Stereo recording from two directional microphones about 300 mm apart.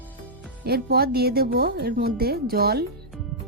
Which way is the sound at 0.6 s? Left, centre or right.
Right.